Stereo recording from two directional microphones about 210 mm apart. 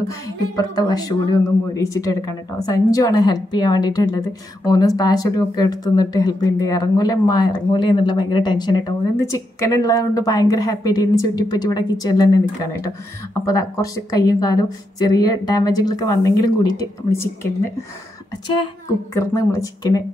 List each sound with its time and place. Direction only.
0.1 s a woman's voice: 20° left (ahead or behind)
13.5 s a woman's voice: 15° left (ahead or behind)
19.1 s a woman's voice: 15° left (ahead or behind)